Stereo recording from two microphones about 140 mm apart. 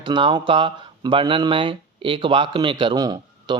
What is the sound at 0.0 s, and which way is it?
Speech, 35° right (ahead or behind).